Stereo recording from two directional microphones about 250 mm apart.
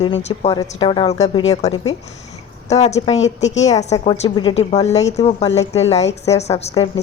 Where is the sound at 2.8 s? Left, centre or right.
Left.